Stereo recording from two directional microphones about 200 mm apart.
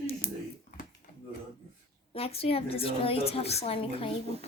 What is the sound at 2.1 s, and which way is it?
A woman's voice, 30° left (ahead or behind).